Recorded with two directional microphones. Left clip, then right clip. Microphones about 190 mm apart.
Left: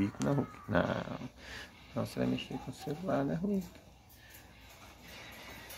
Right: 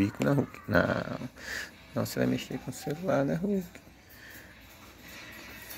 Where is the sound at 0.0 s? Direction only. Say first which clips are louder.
Right 6 dB; 20° right (ahead or behind).